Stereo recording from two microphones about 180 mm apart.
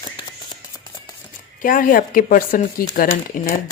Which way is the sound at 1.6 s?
50° left (ahead or behind).